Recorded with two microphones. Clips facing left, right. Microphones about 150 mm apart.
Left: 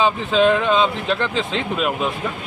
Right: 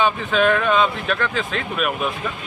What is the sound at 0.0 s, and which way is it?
Speech, 25° left (ahead or behind).